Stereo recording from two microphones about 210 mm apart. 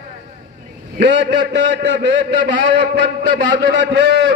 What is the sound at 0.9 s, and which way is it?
A man's voice, 55° right (ahead or behind).